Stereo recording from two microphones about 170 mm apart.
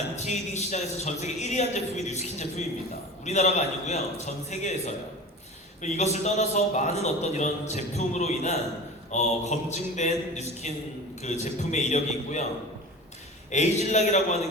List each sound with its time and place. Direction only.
0.3 s a man's voice: 40° left (ahead or behind)
5.8 s a man's voice: 40° left (ahead or behind)
13.5 s a man's voice: 40° left (ahead or behind)